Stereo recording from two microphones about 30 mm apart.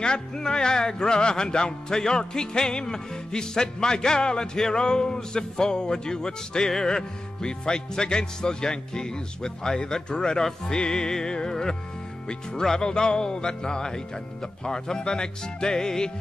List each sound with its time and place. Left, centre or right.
0.0 s speech: left
4.6 s a sound: centre
4.8 s speech: left